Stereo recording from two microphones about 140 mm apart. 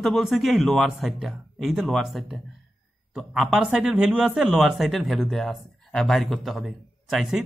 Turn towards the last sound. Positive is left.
turn(degrees=0)  # may be behind; listen again after turning